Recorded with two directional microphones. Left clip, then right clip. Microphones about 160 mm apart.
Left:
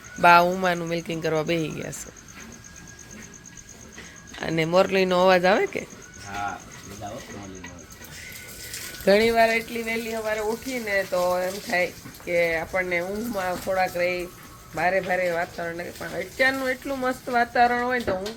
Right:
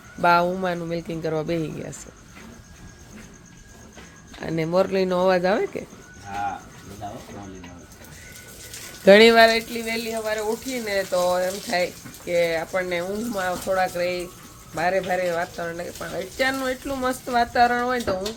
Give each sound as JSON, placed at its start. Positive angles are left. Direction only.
{"t": 0.2, "sound": "speech", "side_deg": 0}
{"t": 4.4, "sound": "speech", "side_deg": -10}
{"t": 9.2, "sound": "speech", "side_deg": -70}
{"t": 9.7, "sound": "speech", "side_deg": -15}